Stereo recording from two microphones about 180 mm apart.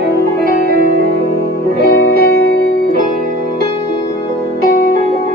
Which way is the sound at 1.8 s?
55° left (ahead or behind).